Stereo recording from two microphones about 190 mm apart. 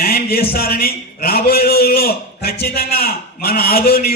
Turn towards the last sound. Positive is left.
turn(degrees=50)  # may be behind; listen again after turning